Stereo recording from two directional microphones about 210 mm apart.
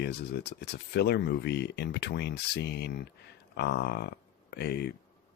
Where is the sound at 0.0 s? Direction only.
50° left (ahead or behind).